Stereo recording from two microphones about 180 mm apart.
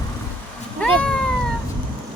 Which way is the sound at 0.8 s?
5° left (ahead or behind).